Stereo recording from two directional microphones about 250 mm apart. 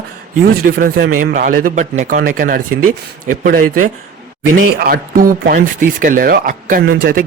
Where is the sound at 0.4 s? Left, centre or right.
Right.